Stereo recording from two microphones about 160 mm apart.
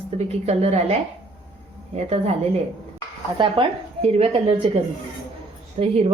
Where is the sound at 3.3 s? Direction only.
30° right (ahead or behind).